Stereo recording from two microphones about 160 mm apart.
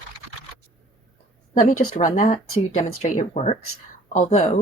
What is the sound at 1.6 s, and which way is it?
Speech, 50° left (ahead or behind).